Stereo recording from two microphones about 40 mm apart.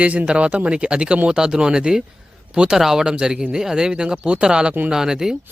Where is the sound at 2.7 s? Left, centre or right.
Centre.